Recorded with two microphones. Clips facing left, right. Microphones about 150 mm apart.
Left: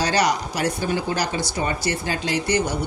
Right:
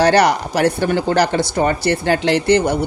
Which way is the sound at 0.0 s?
60° right (ahead or behind).